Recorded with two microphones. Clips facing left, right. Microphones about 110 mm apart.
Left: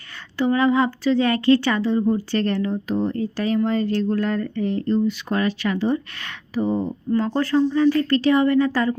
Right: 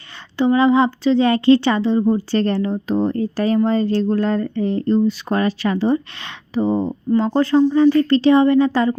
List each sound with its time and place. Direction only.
0.3 s speech: 25° right (ahead or behind)